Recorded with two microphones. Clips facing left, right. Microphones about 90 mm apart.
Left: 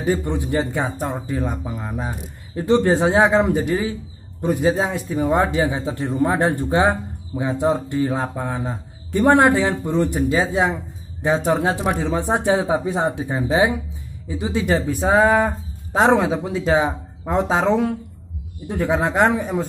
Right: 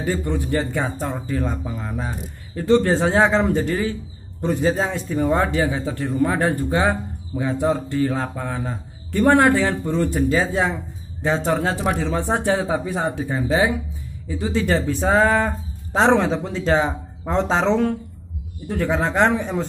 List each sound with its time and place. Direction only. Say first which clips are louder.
0.0 s a man's voice: left 2 dB; 20° left (ahead or behind)